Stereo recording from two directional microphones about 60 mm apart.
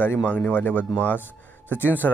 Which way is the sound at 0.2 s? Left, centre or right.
Centre.